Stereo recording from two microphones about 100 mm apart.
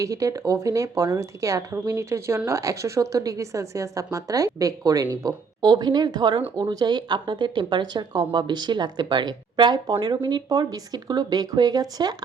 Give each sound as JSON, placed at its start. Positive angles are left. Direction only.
{"t": 0.0, "sound": "a woman's voice", "side_deg": -35}